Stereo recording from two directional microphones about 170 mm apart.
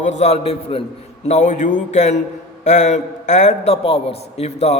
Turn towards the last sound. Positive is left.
turn(degrees=40)  # may be behind; listen again after turning